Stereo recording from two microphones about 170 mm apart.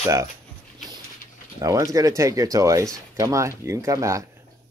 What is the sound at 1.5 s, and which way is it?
Speech, 20° right (ahead or behind).